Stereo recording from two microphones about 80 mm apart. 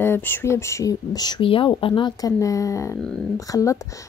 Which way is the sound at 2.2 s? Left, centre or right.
Left.